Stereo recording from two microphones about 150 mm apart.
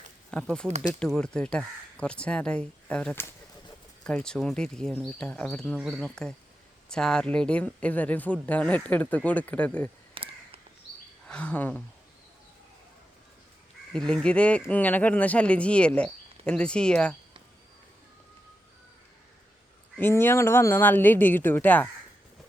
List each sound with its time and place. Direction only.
0.3 s speech: 5° left (ahead or behind)
10.2 s crow: 35° right (ahead or behind)
11.3 s speech: 10° left (ahead or behind)
14.1 s speech: 5° left (ahead or behind)
20.0 s speech: 15° left (ahead or behind)